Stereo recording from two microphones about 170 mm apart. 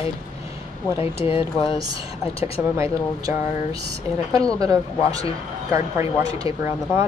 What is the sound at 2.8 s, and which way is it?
Speech, 20° right (ahead or behind).